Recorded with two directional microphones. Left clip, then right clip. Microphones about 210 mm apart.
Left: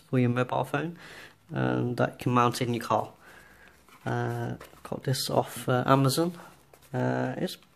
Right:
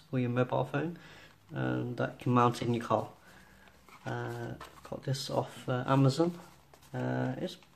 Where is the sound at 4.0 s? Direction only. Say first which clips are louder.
Left 7 dB; 45° left (ahead or behind).